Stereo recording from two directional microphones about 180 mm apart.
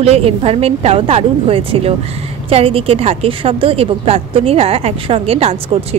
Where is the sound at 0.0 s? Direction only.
35° right (ahead or behind).